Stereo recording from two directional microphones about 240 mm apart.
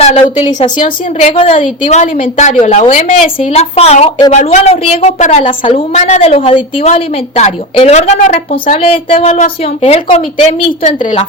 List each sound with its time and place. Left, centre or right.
0.0 s a woman's voice: left